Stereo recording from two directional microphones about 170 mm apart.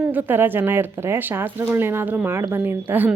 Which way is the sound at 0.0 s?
10° right (ahead or behind).